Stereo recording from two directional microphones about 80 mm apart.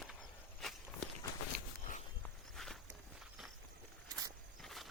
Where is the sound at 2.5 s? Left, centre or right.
Centre.